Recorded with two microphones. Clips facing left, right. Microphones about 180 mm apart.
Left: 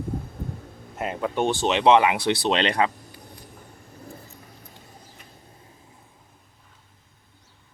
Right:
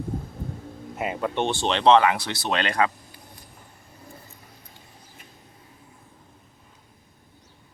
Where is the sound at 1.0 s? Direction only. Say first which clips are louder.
Left 1 dB; centre (ahead or behind); by 2.9 s 20° left (ahead or behind).